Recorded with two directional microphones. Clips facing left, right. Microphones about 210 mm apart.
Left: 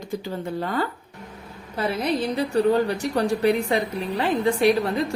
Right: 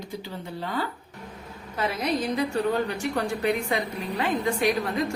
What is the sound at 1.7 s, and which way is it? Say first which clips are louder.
A woman's voice: left 3 dB; 30° left (ahead or behind).